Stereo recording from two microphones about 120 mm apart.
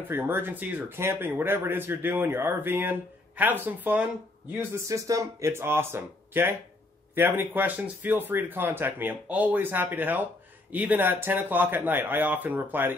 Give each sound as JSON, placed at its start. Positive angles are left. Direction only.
{"t": 0.1, "sound": "speech", "side_deg": -20}